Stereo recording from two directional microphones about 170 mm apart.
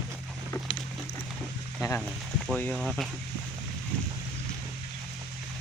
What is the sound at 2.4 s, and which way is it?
Speech, 5° left (ahead or behind).